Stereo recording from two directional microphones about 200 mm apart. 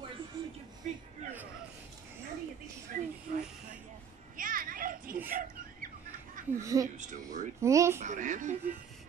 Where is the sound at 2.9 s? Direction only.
40° right (ahead or behind).